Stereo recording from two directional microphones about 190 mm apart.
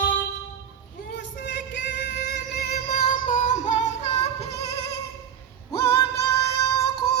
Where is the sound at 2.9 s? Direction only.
45° left (ahead or behind).